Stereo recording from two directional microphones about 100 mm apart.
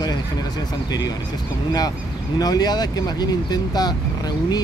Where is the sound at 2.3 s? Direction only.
40° left (ahead or behind).